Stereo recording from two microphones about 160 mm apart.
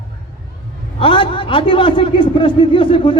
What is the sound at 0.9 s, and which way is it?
A man's voice, 35° left (ahead or behind).